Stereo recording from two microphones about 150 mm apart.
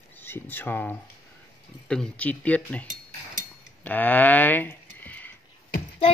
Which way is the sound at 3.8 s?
10° left (ahead or behind).